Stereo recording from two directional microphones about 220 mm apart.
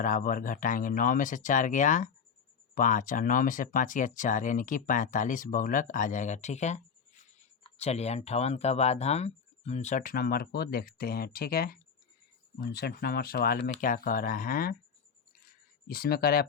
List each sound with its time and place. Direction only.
0.0 s speech: 40° left (ahead or behind)
15.9 s speech: 45° left (ahead or behind)